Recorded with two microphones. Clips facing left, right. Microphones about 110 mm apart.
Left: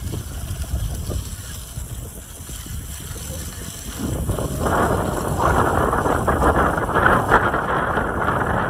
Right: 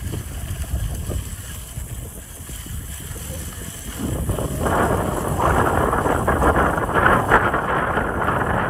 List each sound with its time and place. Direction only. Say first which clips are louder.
0.7 s boat: even; 75° left (ahead or behind)
4.3 s wind noise: even; 25° left (ahead or behind)